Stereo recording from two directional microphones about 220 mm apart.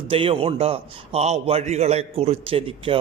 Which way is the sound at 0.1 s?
25° right (ahead or behind).